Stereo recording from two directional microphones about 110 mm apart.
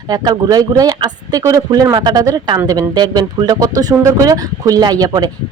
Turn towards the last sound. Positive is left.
turn(degrees=-35)  # may be behind; listen again after turning